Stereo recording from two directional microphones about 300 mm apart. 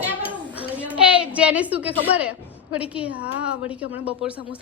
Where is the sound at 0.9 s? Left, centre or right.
Centre.